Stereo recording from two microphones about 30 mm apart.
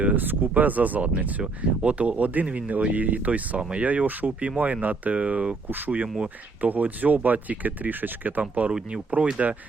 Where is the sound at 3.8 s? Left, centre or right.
Right.